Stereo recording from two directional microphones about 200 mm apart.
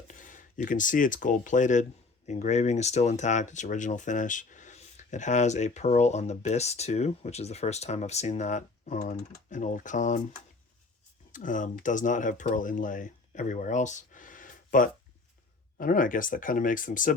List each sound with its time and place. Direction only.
0.1 s speech: 40° left (ahead or behind)
11.3 s speech: 40° left (ahead or behind)